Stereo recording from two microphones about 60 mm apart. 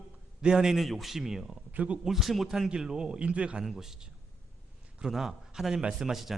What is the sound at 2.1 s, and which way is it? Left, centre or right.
A man's voice, centre.